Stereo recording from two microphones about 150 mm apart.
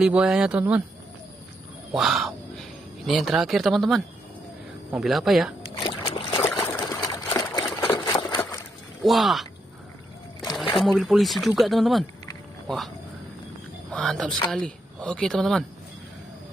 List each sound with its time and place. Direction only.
0.0 s speech: 5° right (ahead or behind)
1.9 s a sound: centre (ahead or behind)
3.1 s speech: centre (ahead or behind)
5.8 s boat: 35° left (ahead or behind)
6.8 s a sound: 25° left (ahead or behind)
9.0 s speech: centre (ahead or behind)
10.8 s speech: centre (ahead or behind)
13.9 s speech: 5° left (ahead or behind)